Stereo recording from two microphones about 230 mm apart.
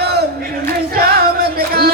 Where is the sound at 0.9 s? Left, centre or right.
Right.